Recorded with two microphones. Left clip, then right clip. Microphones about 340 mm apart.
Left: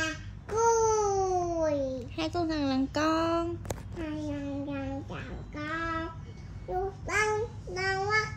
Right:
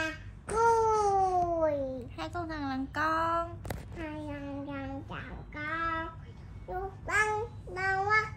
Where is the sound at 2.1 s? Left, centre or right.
Centre.